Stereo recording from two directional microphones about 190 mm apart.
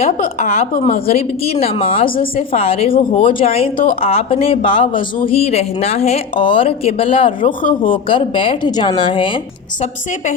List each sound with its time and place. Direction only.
0.0 s a woman's voice: 45° left (ahead or behind)
1.0 s a woman's voice: 30° left (ahead or behind)